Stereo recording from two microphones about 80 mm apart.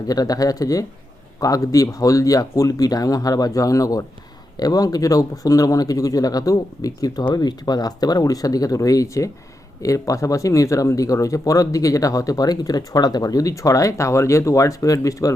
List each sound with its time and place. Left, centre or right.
0.1 s speech: left